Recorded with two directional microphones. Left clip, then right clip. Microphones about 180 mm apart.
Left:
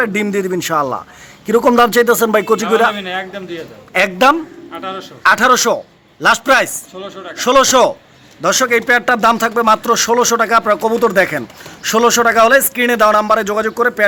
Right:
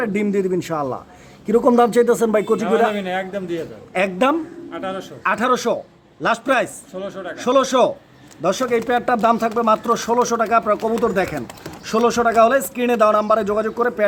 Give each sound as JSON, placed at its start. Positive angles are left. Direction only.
{"t": 0.0, "sound": "speech", "side_deg": -5}
{"t": 2.9, "sound": "a man's voice", "side_deg": -65}
{"t": 3.9, "sound": "speech", "side_deg": -5}
{"t": 4.7, "sound": "a man's voice", "side_deg": -65}
{"t": 5.2, "sound": "speech", "side_deg": 0}
{"t": 6.9, "sound": "a man's voice", "side_deg": -65}
{"t": 7.3, "sound": "speech", "side_deg": -5}